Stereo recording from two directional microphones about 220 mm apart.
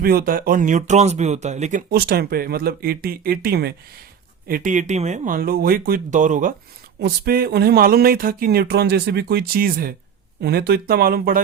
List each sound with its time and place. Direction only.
0.0 s speech: 45° right (ahead or behind)
7.0 s speech: 45° right (ahead or behind)